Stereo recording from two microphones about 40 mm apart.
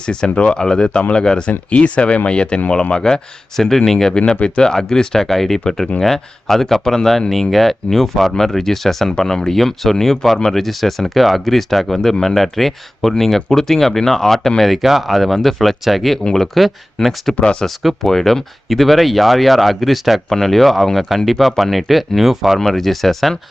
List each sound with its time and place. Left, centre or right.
0.0 s speech: left
14.6 s speech: centre
17.3 s speech: left
17.7 s speech: centre